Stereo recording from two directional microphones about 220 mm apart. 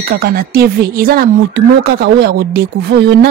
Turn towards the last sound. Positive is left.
turn(degrees=-45)  # may be behind; listen again after turning